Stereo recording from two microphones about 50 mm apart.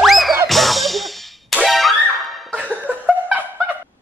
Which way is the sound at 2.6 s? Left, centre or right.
Right.